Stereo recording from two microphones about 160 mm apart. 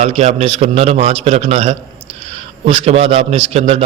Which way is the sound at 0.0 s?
40° right (ahead or behind).